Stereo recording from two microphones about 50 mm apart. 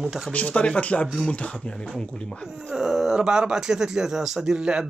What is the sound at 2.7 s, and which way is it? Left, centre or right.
Speech, centre.